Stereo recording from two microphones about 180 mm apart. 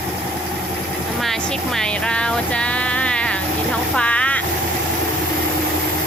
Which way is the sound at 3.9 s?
5° left (ahead or behind).